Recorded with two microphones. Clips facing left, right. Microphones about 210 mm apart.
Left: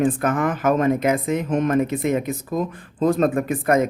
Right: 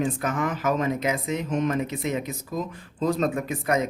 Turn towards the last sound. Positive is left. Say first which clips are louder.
# left 6 dB
turn(degrees=55)  # may be behind; listen again after turning